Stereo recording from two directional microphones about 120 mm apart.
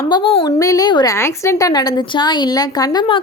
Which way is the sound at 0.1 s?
45° left (ahead or behind).